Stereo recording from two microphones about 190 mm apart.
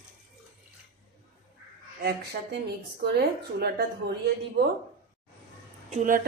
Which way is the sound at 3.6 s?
55° right (ahead or behind).